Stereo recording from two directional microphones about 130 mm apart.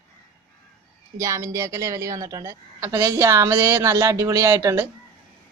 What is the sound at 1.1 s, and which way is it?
Speech, 25° right (ahead or behind).